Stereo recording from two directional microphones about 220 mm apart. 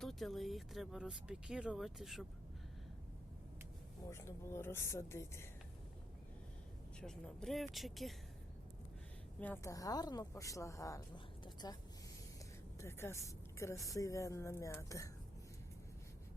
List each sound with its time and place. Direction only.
0.0 s speech: centre (ahead or behind)
4.1 s a woman's voice: 10° left (ahead or behind)
7.0 s speech: 5° left (ahead or behind)
9.4 s a woman's voice: 10° left (ahead or behind)
11.4 s a sound: 20° left (ahead or behind)
12.8 s a woman's voice: 10° left (ahead or behind)